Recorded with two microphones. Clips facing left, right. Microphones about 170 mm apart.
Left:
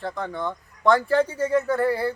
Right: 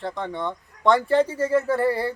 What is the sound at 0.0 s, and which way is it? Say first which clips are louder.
Speech: even; centre (ahead or behind).